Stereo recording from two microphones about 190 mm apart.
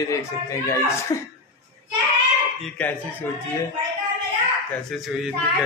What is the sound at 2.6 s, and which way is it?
Speech, 10° left (ahead or behind).